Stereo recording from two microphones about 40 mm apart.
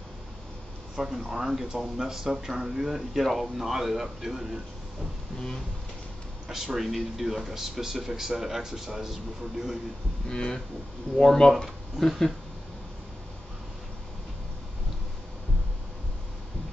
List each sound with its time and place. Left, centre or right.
0.9 s speech: centre
3.1 s speech: centre
6.5 s speech: centre
10.3 s speech: centre